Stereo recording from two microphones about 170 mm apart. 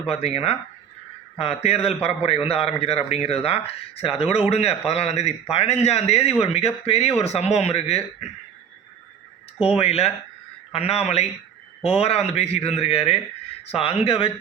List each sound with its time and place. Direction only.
0.0 s a man's voice: 35° left (ahead or behind)
9.6 s a man's voice: 35° left (ahead or behind)